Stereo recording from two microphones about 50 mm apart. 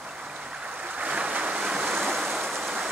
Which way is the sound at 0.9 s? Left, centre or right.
Right.